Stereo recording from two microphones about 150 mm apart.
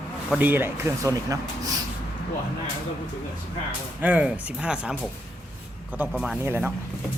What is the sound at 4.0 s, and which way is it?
Speech, 10° right (ahead or behind).